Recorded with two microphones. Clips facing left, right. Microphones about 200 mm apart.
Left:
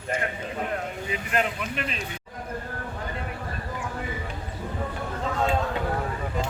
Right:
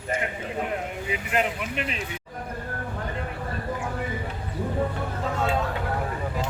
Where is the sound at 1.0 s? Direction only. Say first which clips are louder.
Right 1 dB; 15° right (ahead or behind).